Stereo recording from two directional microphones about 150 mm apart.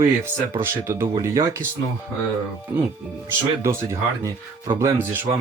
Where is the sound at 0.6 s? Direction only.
15° right (ahead or behind).